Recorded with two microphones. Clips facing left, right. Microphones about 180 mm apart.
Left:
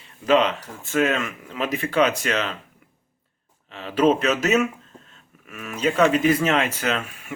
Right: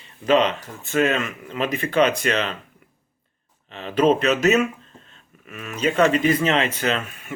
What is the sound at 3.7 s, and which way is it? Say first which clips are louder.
Speech: right 1 dB; 5° left (ahead or behind).